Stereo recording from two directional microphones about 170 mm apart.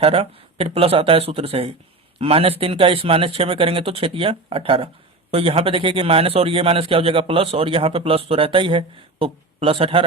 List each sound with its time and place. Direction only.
0.0 s a man's voice: 35° right (ahead or behind)